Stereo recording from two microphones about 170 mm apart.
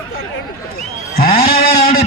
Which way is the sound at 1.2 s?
60° left (ahead or behind).